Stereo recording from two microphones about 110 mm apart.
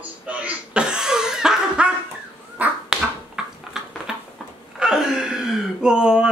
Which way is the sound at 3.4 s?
5° right (ahead or behind).